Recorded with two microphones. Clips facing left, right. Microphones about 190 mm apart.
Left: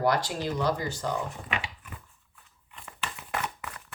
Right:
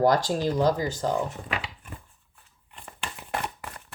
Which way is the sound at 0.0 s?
40° right (ahead or behind).